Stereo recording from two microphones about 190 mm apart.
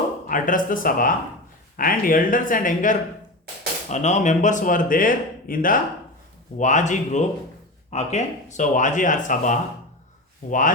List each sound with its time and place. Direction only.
0.3 s speech: 45° left (ahead or behind)